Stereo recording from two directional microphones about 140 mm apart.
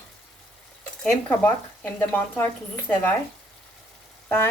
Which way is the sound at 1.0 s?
15° left (ahead or behind).